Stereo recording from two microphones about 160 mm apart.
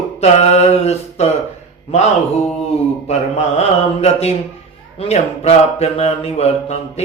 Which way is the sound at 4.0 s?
40° left (ahead or behind).